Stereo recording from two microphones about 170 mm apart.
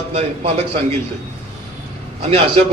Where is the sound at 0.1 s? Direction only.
40° right (ahead or behind).